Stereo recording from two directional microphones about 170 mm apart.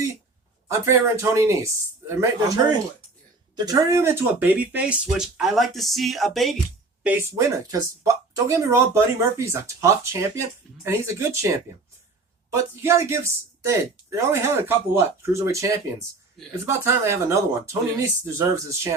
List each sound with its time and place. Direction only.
0.7 s speech: 15° right (ahead or behind); by 6.6 s centre (ahead or behind)
7.0 s speech: 10° right (ahead or behind)
12.8 s speech: 15° right (ahead or behind)